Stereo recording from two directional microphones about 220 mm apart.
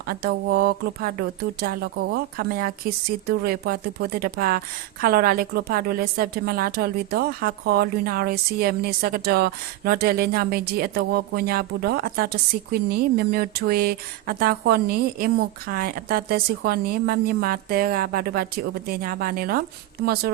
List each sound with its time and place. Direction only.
0.1 s speech: 45° right (ahead or behind)